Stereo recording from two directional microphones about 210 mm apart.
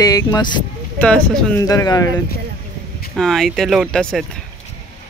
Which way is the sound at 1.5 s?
15° left (ahead or behind).